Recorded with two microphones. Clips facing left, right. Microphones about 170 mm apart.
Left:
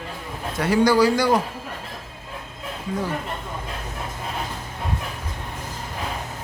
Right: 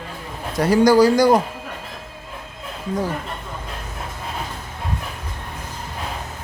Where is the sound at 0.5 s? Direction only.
40° right (ahead or behind).